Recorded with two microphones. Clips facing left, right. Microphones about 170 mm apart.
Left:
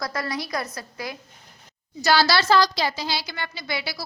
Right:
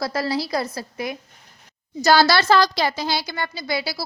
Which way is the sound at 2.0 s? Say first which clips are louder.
Right 4 dB; 45° right (ahead or behind).